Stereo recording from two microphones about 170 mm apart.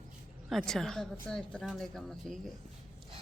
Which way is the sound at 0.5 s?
Centre (ahead or behind).